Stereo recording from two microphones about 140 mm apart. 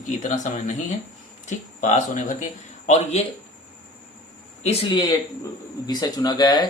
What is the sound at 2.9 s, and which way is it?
Speech, 50° left (ahead or behind).